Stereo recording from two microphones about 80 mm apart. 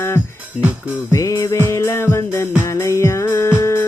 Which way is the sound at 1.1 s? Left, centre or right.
Left.